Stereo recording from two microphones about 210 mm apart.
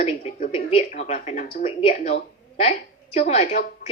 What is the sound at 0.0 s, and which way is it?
A woman's voice, 35° left (ahead or behind).